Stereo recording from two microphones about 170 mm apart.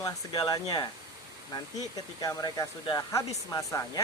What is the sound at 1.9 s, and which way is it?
Speech, 20° left (ahead or behind).